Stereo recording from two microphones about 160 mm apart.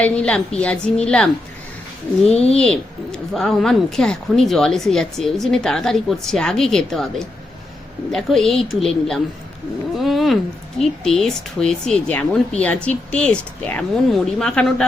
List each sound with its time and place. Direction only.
0.0 s a woman's voice: 5° left (ahead or behind)
2.3 s a child's voice: 40° left (ahead or behind)
2.6 s a woman's voice: 5° left (ahead or behind)
10.0 s cat: centre (ahead or behind)
10.8 s a woman's voice: 5° left (ahead or behind)